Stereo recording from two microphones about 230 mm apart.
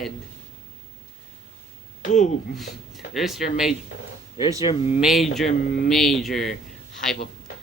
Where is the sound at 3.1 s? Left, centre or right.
Centre.